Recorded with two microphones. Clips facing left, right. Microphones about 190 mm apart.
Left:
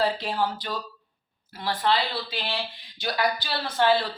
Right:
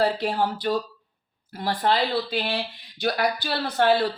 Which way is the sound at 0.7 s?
50° right (ahead or behind).